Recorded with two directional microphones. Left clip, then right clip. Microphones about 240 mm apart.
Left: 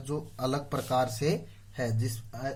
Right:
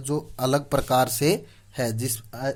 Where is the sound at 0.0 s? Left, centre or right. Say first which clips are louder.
Right 7 dB; right.